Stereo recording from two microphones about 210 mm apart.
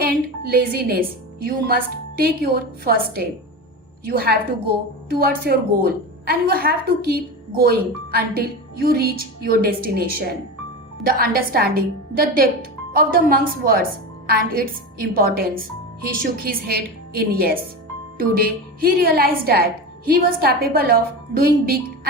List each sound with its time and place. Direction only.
0.0 s a woman's voice: 45° right (ahead or behind)